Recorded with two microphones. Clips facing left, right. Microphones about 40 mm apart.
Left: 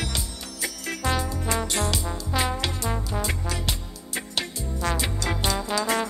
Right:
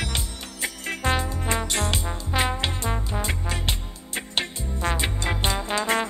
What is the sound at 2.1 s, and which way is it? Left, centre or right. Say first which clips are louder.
Music: right 1 dB; right.